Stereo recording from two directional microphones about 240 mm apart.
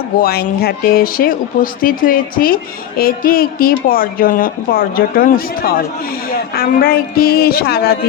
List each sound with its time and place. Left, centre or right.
0.2 s a woman's voice: left